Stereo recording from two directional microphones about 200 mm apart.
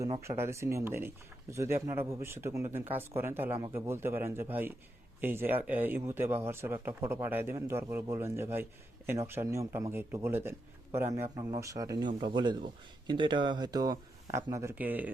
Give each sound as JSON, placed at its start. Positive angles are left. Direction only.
{"t": 0.2, "sound": "speech", "side_deg": -15}